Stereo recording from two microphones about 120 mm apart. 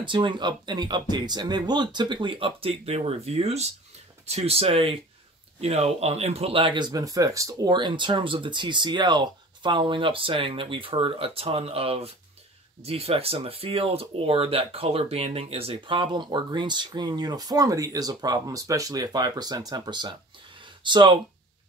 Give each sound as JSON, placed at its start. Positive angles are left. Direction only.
{"t": 0.0, "sound": "speech", "side_deg": -40}
{"t": 7.7, "sound": "speech", "side_deg": -40}
{"t": 20.6, "sound": "a sound", "side_deg": -40}